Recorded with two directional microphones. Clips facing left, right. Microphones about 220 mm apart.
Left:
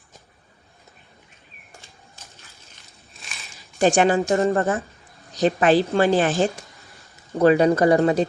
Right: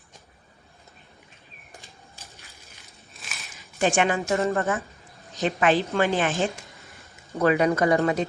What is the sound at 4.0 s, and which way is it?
Speech, 35° left (ahead or behind).